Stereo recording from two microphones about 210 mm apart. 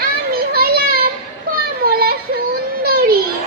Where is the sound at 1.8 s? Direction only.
45° right (ahead or behind).